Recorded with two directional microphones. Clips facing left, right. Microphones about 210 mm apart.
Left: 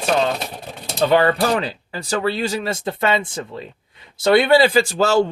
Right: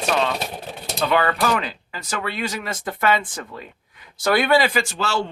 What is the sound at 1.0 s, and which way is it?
Speech, 30° left (ahead or behind).